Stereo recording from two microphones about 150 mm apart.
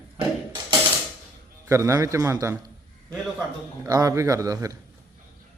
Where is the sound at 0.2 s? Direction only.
25° right (ahead or behind).